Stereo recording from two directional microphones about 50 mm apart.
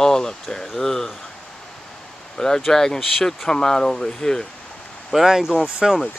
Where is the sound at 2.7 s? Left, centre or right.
Centre.